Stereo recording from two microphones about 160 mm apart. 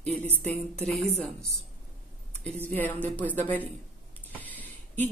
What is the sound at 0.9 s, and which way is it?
Speech, centre (ahead or behind).